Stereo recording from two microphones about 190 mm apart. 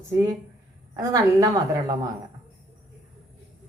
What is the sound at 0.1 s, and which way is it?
A woman's voice, 15° right (ahead or behind).